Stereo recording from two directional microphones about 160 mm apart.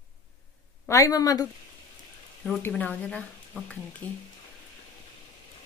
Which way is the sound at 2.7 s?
10° left (ahead or behind).